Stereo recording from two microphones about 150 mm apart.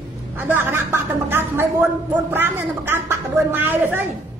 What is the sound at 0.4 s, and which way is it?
A woman's voice, 15° right (ahead or behind).